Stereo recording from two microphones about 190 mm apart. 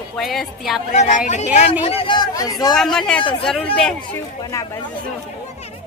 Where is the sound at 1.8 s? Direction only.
30° left (ahead or behind).